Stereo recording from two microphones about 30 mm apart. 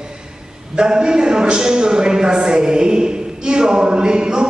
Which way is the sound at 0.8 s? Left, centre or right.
Right.